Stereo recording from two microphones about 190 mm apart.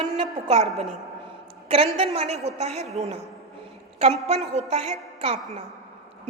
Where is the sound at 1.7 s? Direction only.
30° right (ahead or behind).